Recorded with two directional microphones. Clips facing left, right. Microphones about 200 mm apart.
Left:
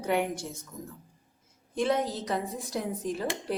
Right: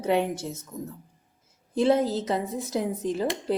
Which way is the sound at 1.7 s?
25° right (ahead or behind).